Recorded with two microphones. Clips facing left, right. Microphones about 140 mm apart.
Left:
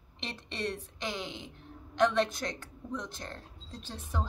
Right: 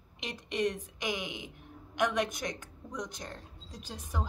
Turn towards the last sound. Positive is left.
turn(degrees=-10)  # may be behind; listen again after turning